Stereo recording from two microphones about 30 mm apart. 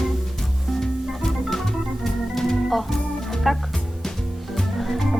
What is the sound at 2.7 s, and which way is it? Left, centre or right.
Organ, centre.